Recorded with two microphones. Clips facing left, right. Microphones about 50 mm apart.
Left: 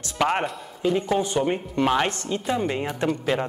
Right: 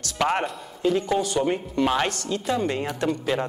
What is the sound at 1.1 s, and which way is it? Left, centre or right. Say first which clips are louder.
Speech: even; left.